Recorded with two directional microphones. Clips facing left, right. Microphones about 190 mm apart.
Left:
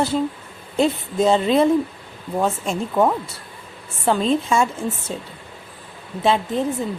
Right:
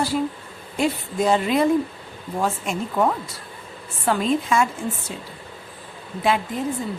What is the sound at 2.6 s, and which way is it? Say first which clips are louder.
A woman's voice: left 3 dB; 25° left (ahead or behind).